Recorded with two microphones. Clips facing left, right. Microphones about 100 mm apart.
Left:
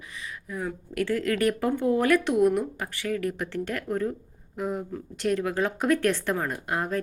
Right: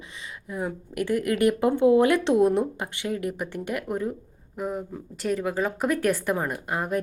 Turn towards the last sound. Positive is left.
turn(degrees=0)  # may be behind; listen again after turning